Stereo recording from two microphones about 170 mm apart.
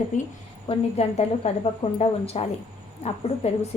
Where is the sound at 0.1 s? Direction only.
45° left (ahead or behind).